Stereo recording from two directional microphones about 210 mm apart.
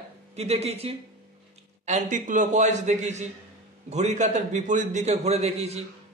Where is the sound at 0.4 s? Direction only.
30° right (ahead or behind).